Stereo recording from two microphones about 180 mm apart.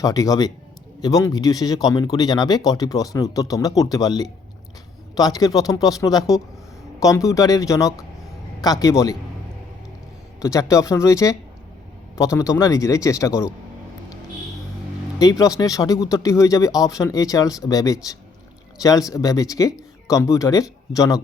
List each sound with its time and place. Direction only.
0.0 s speech: 20° left (ahead or behind)
10.4 s speech: 15° left (ahead or behind)
15.2 s speech: 20° left (ahead or behind)